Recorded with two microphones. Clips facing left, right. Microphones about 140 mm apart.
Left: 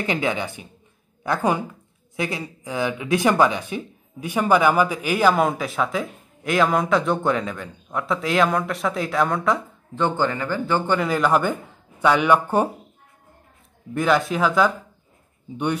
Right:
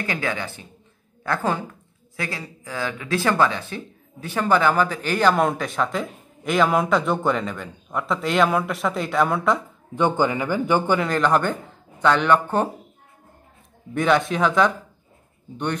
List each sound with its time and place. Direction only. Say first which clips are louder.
0.0 s speech: left 3 dB; 20° left (ahead or behind); by 9.6 s centre (ahead or behind)
9.9 s a man's voice: right 2 dB; 15° right (ahead or behind)
11.0 s speech: even; 5° left (ahead or behind)
13.9 s speech: even; centre (ahead or behind)